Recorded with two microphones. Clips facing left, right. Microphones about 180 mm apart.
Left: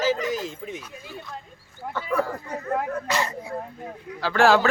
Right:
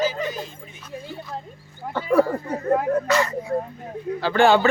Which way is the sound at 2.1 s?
30° right (ahead or behind).